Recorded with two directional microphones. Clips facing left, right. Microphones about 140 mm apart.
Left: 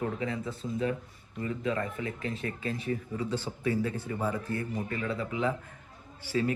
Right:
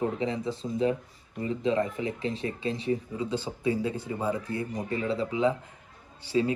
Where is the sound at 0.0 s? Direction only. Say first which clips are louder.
Right 4 dB; 20° right (ahead or behind).